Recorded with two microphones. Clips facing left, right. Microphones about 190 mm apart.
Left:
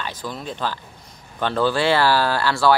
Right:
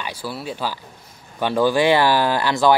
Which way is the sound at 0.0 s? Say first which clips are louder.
Right 1 dB; 10° right (ahead or behind).